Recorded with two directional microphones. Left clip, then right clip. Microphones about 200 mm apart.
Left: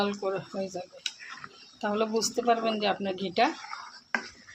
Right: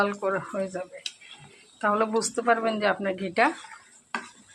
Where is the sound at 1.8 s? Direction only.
5° right (ahead or behind).